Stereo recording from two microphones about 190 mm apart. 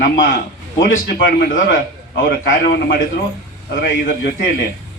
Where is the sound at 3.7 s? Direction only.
50° left (ahead or behind).